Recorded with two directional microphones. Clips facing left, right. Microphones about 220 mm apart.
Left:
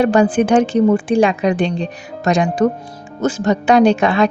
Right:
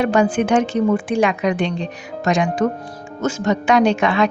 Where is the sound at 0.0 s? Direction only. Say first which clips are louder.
Left 3 dB; 35° left (ahead or behind).